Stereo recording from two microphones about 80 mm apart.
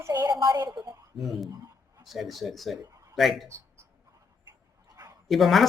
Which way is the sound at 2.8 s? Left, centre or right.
Right.